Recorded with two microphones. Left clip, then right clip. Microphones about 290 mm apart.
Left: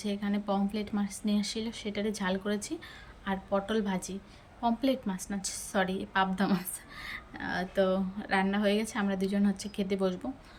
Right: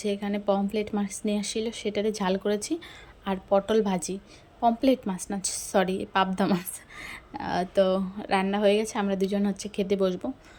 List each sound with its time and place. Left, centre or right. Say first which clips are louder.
0.0 s a woman's voice: right 7 dB; centre